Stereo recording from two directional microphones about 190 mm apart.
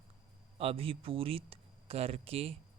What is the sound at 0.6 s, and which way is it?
Speech, 30° right (ahead or behind).